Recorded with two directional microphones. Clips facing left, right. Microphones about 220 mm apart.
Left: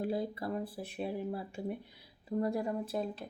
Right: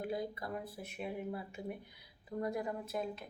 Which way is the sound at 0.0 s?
30° left (ahead or behind).